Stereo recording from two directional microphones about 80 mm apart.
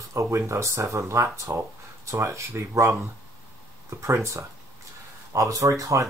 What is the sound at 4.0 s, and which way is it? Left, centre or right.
Speech, right.